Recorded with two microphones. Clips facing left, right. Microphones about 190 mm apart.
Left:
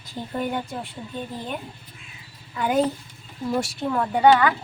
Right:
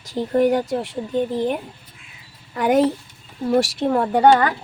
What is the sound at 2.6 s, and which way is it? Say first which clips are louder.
Speech: right 5 dB; 75° right (ahead or behind).